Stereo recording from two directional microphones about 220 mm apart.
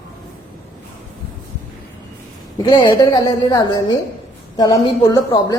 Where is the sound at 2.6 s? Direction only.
20° left (ahead or behind).